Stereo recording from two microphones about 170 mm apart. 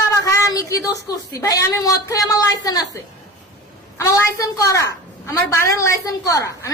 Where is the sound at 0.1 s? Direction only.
20° left (ahead or behind).